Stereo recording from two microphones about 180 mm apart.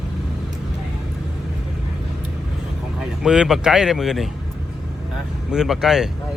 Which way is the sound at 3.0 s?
5° right (ahead or behind).